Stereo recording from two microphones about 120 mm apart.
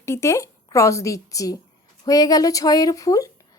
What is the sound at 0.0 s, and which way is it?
A woman's voice, 25° left (ahead or behind).